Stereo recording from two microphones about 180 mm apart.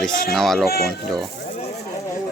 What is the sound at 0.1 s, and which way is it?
Speech, 50° left (ahead or behind).